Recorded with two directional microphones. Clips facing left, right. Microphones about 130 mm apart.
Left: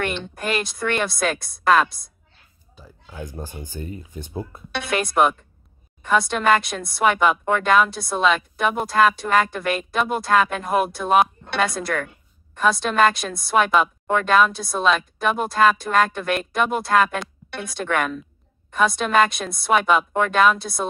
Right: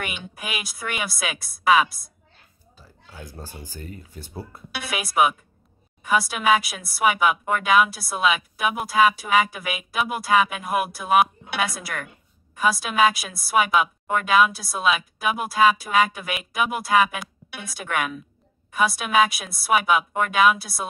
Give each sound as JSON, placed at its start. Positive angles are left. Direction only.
{"t": 0.0, "sound": "a woman's voice", "side_deg": -5}
{"t": 2.7, "sound": "speech", "side_deg": 15}
{"t": 4.7, "sound": "a woman's voice", "side_deg": -5}